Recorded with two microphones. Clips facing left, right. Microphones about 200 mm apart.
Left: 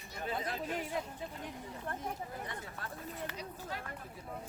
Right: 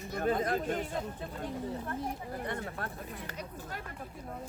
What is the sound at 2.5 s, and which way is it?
Speech, 55° right (ahead or behind).